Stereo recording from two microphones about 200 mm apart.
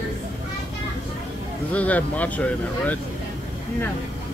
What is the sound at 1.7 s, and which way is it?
Speech, 5° left (ahead or behind).